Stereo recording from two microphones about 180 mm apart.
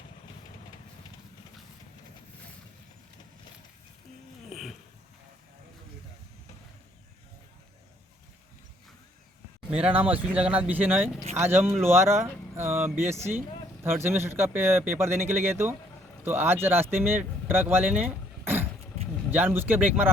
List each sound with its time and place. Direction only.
4.4 s dog: centre (ahead or behind)
9.7 s speech: 10° right (ahead or behind)